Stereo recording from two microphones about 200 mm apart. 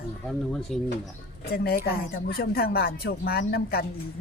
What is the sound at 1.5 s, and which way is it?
Speech, 50° left (ahead or behind).